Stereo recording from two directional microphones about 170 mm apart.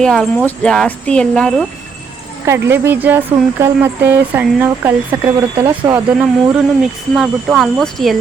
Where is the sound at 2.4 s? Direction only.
15° right (ahead or behind).